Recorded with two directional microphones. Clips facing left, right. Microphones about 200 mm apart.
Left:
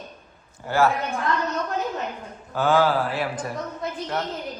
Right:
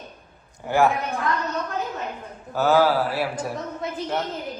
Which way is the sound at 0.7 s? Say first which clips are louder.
Right 1 dB; 15° right (ahead or behind).